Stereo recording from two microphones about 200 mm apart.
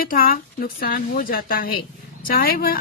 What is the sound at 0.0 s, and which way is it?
Speech, 45° left (ahead or behind).